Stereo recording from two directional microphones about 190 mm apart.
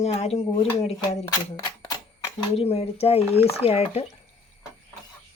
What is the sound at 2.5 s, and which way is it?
Speech, 30° left (ahead or behind).